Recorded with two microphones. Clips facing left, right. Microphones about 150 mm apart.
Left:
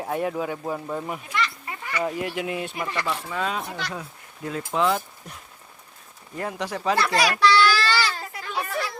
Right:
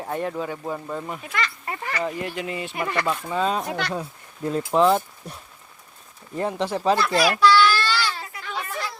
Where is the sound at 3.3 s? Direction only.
30° right (ahead or behind).